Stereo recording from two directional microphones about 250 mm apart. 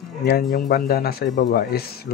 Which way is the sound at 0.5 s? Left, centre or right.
Left.